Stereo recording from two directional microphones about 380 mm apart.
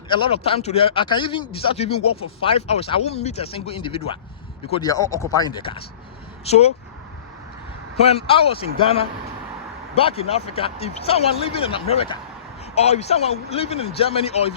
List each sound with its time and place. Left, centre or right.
0.1 s speech: centre
8.0 s speech: centre